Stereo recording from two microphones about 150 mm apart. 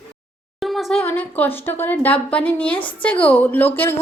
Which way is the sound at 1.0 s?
10° left (ahead or behind).